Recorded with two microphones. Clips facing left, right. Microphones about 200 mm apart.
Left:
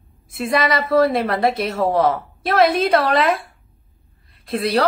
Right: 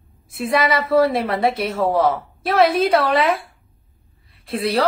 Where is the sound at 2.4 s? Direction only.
30° right (ahead or behind).